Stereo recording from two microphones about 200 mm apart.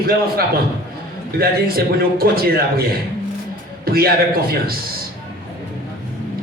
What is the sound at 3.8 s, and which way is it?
Speech, 50° right (ahead or behind).